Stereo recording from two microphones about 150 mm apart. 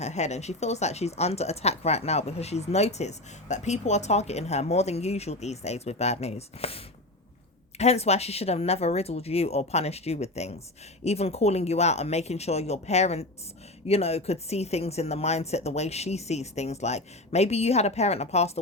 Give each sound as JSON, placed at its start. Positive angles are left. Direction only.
{"t": 0.0, "sound": "speech", "side_deg": 50}